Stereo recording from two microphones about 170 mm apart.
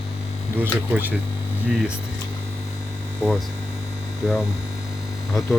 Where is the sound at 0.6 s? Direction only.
10° right (ahead or behind).